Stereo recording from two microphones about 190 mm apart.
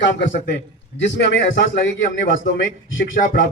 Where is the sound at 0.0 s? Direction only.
65° left (ahead or behind).